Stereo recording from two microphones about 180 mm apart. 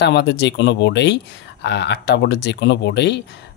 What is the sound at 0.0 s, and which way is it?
Speech, 70° left (ahead or behind).